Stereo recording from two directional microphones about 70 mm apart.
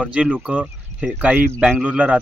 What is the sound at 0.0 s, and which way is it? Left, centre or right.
Speech, centre.